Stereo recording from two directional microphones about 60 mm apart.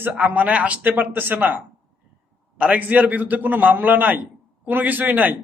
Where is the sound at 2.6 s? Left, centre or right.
Right.